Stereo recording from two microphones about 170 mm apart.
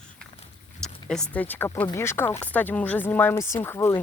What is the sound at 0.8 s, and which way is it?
Speech, 5° left (ahead or behind).